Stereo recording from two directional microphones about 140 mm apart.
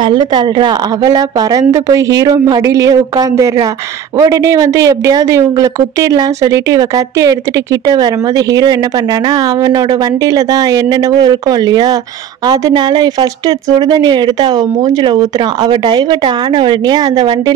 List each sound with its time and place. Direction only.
0.0 s a woman's voice: 35° right (ahead or behind)